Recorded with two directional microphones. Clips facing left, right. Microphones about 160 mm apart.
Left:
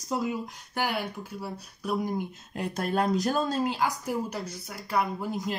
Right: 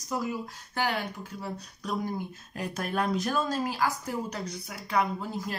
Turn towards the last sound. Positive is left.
turn(degrees=20)  # may be behind; listen again after turning